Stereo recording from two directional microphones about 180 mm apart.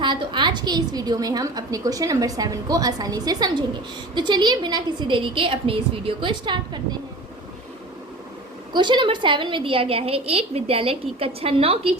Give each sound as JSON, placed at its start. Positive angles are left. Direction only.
{"t": 0.0, "sound": "a woman's voice", "side_deg": -25}
{"t": 8.7, "sound": "a woman's voice", "side_deg": -25}